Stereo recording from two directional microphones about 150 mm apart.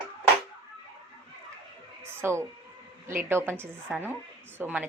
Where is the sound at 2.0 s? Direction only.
15° right (ahead or behind).